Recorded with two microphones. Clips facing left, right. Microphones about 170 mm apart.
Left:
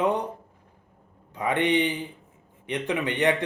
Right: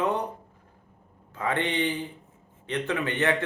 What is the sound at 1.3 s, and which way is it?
Speech, 15° left (ahead or behind).